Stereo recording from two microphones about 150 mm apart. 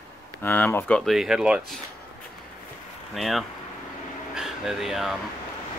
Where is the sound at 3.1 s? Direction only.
Centre (ahead or behind).